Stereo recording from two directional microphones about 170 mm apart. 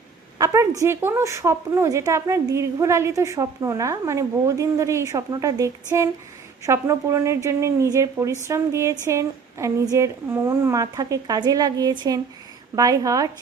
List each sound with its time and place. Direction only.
0.3 s a woman's voice: 20° right (ahead or behind)